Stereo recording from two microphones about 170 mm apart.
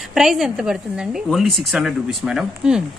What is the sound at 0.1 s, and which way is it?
Speech, centre (ahead or behind).